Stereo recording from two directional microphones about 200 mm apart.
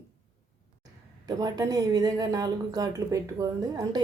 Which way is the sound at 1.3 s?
15° right (ahead or behind).